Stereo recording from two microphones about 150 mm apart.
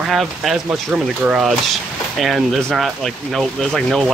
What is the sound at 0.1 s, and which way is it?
Speech, centre (ahead or behind).